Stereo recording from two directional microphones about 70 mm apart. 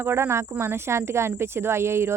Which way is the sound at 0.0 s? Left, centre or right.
Right.